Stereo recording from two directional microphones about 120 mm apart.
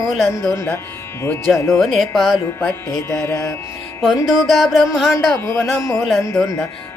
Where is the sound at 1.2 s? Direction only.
5° left (ahead or behind).